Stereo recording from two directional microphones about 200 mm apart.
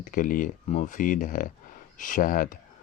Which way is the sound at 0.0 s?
40° left (ahead or behind).